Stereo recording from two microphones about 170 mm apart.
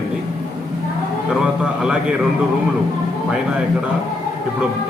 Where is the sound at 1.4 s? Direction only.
5° right (ahead or behind).